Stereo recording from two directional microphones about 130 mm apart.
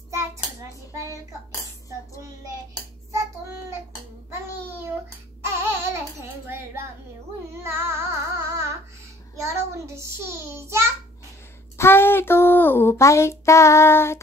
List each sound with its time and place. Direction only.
0.1 s hands: 25° right (ahead or behind)
5.4 s babbling: 20° right (ahead or behind)
7.6 s carnatic music: 20° right (ahead or behind)
9.4 s a child's voice: 20° right (ahead or behind)
11.7 s speech: 20° left (ahead or behind)